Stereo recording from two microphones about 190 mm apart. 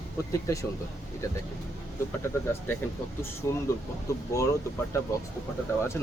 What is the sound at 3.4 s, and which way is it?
Speech, 15° left (ahead or behind).